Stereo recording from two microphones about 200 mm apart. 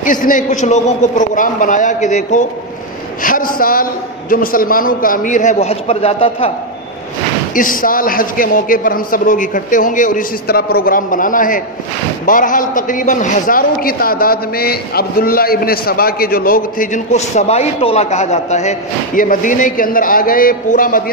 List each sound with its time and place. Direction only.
0.0 s a man's voice: 40° left (ahead or behind)
7.5 s a man's voice: 45° left (ahead or behind)